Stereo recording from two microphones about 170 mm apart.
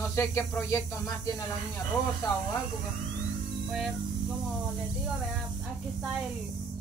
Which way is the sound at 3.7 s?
Centre (ahead or behind).